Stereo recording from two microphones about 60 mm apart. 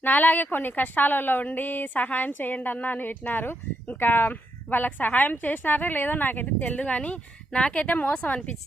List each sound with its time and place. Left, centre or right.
0.0 s a woman's voice: left